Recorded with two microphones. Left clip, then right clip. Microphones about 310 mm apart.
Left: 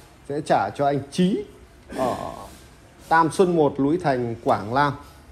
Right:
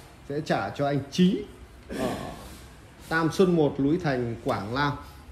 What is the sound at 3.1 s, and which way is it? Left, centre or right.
A man's voice, centre.